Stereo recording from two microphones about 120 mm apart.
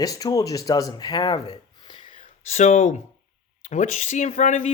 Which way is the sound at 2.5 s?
80° left.